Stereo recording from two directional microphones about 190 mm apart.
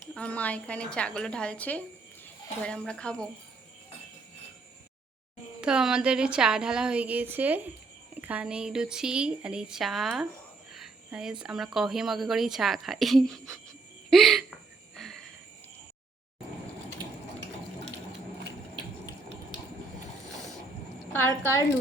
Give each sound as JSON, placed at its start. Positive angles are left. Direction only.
{"t": 0.1, "sound": "speech", "side_deg": 5}
{"t": 5.5, "sound": "speech", "side_deg": -5}
{"t": 10.8, "sound": "cricket", "side_deg": -5}
{"t": 11.4, "sound": "speech", "side_deg": 0}
{"t": 21.1, "sound": "a woman's voice", "side_deg": 10}